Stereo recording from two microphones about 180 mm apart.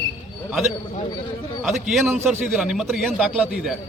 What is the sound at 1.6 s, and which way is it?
Speech, centre (ahead or behind).